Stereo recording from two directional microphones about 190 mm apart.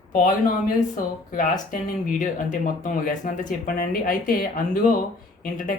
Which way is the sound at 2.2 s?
45° left (ahead or behind).